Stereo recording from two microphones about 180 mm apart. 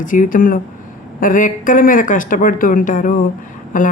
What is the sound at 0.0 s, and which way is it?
A man's voice, 45° left (ahead or behind).